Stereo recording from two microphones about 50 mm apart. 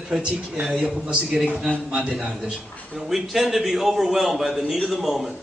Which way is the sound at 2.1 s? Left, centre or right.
Centre.